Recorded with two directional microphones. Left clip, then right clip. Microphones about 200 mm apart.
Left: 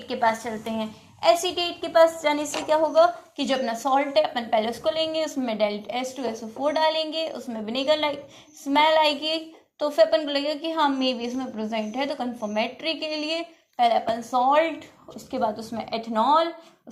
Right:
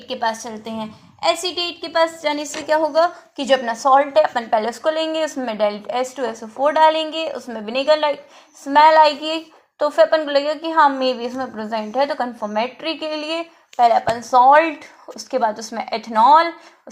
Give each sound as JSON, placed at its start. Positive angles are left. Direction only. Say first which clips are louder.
{"t": 0.1, "sound": "a woman's voice", "louder": "right 1 dB", "side_deg": -15}